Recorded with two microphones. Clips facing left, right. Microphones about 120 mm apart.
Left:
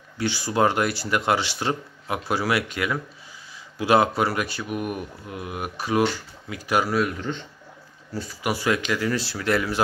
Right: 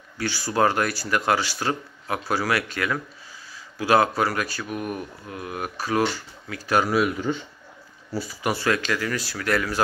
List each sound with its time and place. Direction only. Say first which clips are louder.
0.2 s speech: even; 20° left (ahead or behind)
6.9 s speech: right 2 dB; 5° right (ahead or behind)
8.5 s speech: even; 15° left (ahead or behind)